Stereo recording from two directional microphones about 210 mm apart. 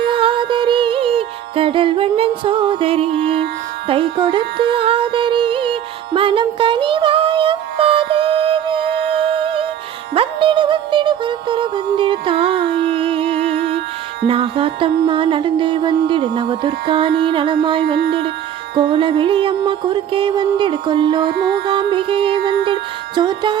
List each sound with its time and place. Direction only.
0.0 s music: 25° right (ahead or behind)
21.3 s music: 50° right (ahead or behind)
21.7 s music: 25° right (ahead or behind)